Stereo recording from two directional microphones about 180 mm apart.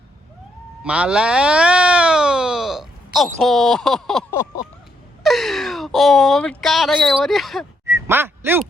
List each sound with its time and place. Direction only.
0.9 s speech: 5° right (ahead or behind)
4.3 s a sound: 15° left (ahead or behind)
5.2 s speech: centre (ahead or behind)
7.9 s quack: 15° right (ahead or behind)